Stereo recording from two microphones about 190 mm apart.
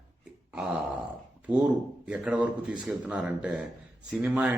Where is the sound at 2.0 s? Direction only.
5° right (ahead or behind).